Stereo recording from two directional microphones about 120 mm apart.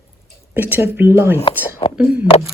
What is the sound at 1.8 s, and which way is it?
Speech, 35° left (ahead or behind).